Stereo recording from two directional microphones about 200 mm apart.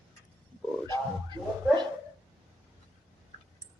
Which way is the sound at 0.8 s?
20° right (ahead or behind).